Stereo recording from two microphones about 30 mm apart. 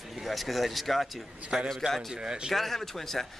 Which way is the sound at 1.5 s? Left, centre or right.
Centre.